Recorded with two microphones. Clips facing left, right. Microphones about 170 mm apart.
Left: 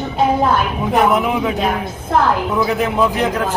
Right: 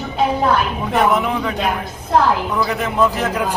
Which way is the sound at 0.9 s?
5° left (ahead or behind).